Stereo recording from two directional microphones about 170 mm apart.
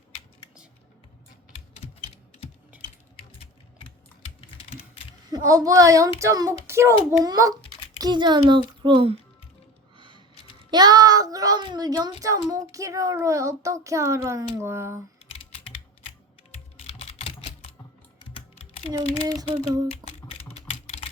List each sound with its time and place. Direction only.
5.5 s a child's voice: 20° right (ahead or behind)
10.0 s a sound: 25° right (ahead or behind)
10.7 s a child's voice: 25° right (ahead or behind)
16.7 s typing: 35° left (ahead or behind)
19.4 s a child's voice: 20° right (ahead or behind)
19.9 s typing: 35° left (ahead or behind)